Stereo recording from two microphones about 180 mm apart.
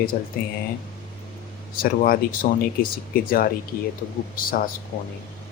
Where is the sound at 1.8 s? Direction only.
55° left (ahead or behind).